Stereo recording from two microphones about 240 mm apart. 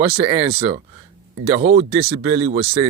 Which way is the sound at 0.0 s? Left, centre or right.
Right.